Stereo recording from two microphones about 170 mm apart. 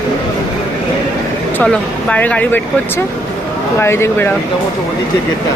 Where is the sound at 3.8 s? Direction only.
15° left (ahead or behind).